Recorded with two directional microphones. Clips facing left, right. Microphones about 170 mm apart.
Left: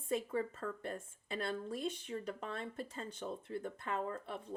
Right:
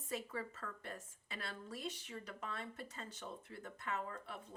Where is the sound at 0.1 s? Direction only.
25° left (ahead or behind).